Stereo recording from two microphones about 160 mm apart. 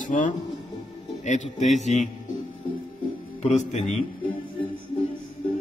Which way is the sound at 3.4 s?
45° left (ahead or behind).